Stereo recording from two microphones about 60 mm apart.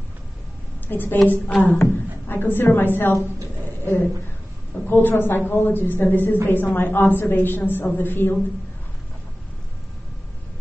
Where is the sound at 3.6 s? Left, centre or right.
Left.